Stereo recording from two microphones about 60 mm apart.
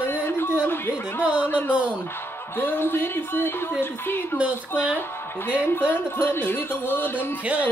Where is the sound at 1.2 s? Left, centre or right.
Right.